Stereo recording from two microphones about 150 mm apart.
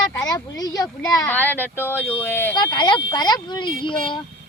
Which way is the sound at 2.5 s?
30° left (ahead or behind).